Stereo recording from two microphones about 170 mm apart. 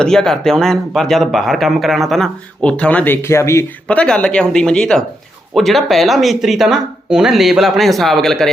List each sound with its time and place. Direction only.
0.0 s speech: 5° left (ahead or behind)